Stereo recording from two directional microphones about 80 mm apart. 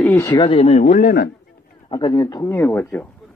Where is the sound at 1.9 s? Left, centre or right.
Left.